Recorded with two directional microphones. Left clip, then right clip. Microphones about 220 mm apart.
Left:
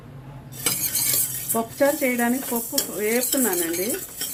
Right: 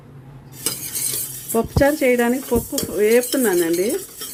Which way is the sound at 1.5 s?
45° right (ahead or behind).